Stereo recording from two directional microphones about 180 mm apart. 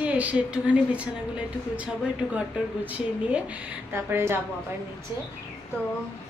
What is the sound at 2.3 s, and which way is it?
A woman's voice, 10° right (ahead or behind).